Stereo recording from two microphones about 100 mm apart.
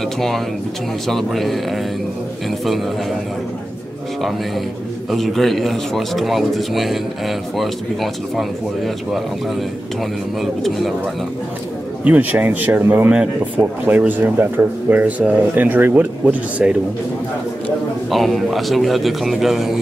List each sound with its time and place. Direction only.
1.0 s speech: centre (ahead or behind)
5.1 s speech: centre (ahead or behind)
10.4 s speech: centre (ahead or behind)
12.0 s speech: 15° right (ahead or behind)
13.1 s speech: 10° right (ahead or behind)
18.1 s speech: centre (ahead or behind)